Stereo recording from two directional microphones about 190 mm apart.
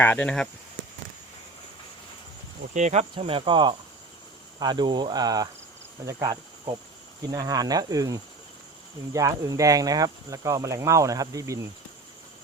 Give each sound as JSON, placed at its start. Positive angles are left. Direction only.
{"t": 0.0, "sound": "speech", "side_deg": 10}
{"t": 2.7, "sound": "cricket", "side_deg": -35}
{"t": 6.1, "sound": "insect", "side_deg": -20}
{"t": 7.3, "sound": "cricket", "side_deg": -20}
{"t": 9.1, "sound": "speech", "side_deg": -20}